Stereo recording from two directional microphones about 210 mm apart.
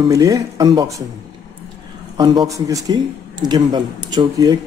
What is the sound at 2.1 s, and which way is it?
Speech, 20° right (ahead or behind).